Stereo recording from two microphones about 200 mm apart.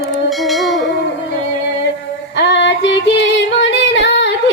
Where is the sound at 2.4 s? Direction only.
60° left (ahead or behind).